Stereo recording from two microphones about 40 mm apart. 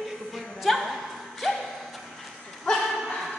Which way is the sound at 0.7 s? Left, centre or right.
Centre.